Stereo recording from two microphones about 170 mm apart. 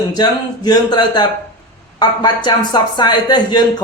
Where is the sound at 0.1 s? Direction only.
25° left (ahead or behind).